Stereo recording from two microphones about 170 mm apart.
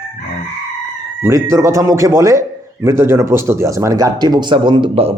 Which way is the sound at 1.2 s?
15° right (ahead or behind).